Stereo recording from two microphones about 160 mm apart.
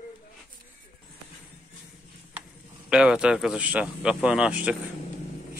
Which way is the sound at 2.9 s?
5° right (ahead or behind).